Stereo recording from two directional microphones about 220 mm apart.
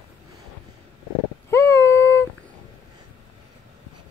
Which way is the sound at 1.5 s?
10° left (ahead or behind).